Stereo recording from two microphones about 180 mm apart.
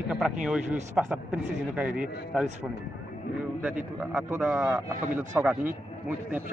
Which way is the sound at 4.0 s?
5° right (ahead or behind).